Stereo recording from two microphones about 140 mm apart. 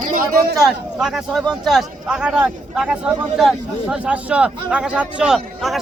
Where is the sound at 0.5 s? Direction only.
5° right (ahead or behind).